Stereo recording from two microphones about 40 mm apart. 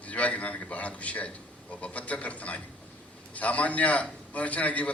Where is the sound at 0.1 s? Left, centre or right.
Left.